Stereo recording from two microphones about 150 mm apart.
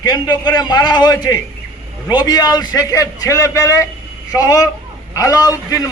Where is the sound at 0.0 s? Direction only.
25° left (ahead or behind).